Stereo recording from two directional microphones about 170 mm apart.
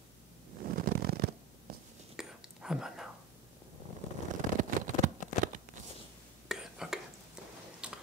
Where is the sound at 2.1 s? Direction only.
5° right (ahead or behind).